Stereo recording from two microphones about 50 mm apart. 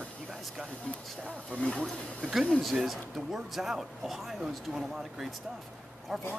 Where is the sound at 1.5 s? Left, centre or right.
Centre.